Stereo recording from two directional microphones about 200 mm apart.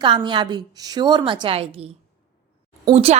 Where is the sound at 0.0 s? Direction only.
25° right (ahead or behind).